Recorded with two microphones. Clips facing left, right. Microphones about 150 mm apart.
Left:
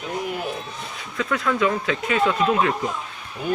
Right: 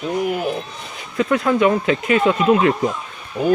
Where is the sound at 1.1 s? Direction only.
25° right (ahead or behind).